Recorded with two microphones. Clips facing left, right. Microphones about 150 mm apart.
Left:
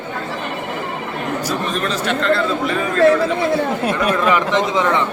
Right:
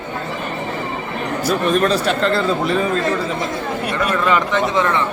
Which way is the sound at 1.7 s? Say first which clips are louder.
Right 4 dB; 40° right (ahead or behind).